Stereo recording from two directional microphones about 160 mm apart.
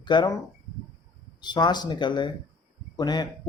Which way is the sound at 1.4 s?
25° left (ahead or behind).